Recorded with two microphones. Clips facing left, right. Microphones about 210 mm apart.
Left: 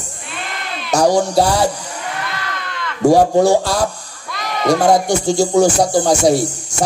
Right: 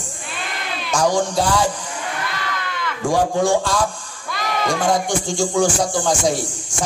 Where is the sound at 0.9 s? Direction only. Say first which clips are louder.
Left 5 dB; 40° left (ahead or behind).